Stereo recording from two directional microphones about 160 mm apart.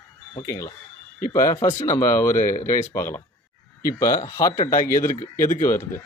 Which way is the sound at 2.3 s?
55° left (ahead or behind).